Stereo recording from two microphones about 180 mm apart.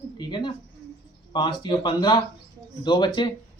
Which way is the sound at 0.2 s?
25° left (ahead or behind).